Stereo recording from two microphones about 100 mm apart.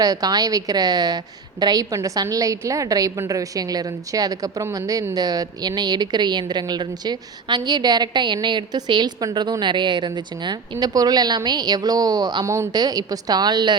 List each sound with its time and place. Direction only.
0.0 s a woman's voice: 40° right (ahead or behind)